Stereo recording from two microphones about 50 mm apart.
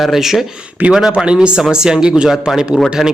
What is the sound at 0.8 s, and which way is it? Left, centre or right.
Speech, right.